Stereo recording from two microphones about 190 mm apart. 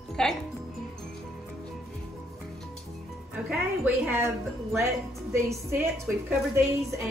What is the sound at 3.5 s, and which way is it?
A woman's voice, 5° right (ahead or behind).